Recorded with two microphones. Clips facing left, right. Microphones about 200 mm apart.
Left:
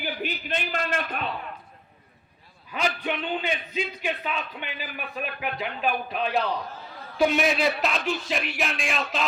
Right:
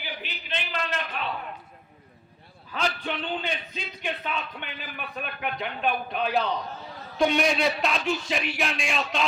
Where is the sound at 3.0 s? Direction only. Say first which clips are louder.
Left 2 dB; 10° left (ahead or behind).